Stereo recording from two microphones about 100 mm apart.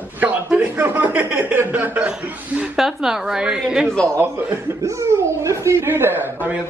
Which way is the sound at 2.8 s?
5° right (ahead or behind).